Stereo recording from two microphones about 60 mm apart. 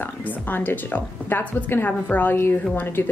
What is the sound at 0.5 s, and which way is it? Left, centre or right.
A woman's voice, left.